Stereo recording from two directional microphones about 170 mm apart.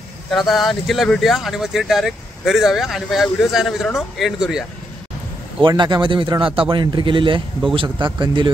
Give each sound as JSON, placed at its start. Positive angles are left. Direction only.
{"t": 0.3, "sound": "speech", "side_deg": 0}
{"t": 5.6, "sound": "speech", "side_deg": -25}